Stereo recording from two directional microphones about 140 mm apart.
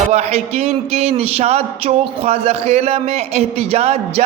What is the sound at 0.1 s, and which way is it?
A man's voice, 50° right (ahead or behind).